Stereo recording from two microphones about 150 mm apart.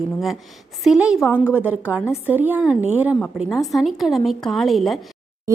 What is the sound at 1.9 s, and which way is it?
A woman's voice, 10° right (ahead or behind).